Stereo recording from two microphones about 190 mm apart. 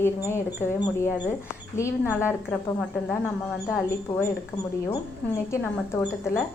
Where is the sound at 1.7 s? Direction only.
15° left (ahead or behind).